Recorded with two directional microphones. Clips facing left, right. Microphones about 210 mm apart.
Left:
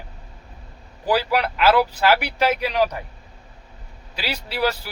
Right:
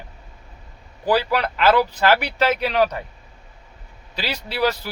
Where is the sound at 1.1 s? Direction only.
10° left (ahead or behind).